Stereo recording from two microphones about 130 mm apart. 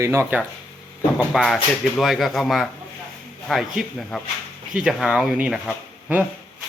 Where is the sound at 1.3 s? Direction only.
Centre (ahead or behind).